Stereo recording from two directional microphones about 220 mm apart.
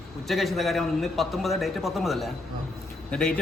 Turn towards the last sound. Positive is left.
turn(degrees=5)  # may be behind; listen again after turning